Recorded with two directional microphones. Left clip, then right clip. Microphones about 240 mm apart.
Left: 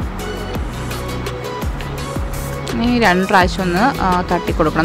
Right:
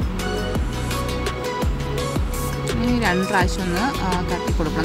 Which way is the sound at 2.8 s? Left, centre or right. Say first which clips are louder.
Left 8 dB; centre.